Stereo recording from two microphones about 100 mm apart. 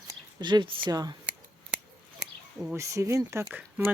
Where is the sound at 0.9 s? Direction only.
40° right (ahead or behind).